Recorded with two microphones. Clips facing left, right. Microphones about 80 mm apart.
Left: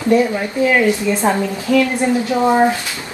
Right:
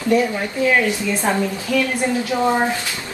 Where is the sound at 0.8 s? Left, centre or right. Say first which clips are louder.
Left 5 dB; left.